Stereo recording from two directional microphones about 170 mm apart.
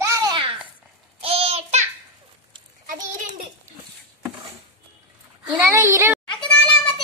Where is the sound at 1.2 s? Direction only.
35° right (ahead or behind).